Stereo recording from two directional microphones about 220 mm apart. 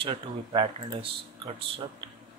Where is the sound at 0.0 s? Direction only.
25° right (ahead or behind).